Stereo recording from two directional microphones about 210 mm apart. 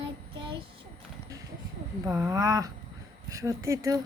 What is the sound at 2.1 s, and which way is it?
Speech, 15° right (ahead or behind).